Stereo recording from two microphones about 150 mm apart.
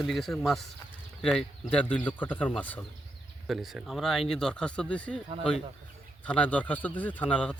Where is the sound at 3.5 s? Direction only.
Centre (ahead or behind).